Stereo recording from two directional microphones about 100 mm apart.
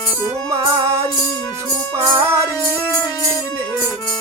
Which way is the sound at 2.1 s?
25° right (ahead or behind).